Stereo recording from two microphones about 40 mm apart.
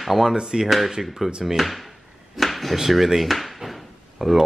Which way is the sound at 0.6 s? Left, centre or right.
Centre.